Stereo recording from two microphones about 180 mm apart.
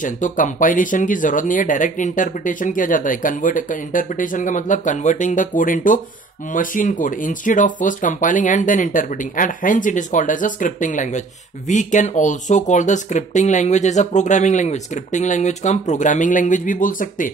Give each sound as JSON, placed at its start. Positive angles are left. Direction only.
{"t": 0.0, "sound": "speech", "side_deg": 45}